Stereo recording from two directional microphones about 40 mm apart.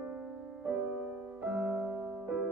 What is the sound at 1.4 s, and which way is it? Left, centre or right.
Music, right.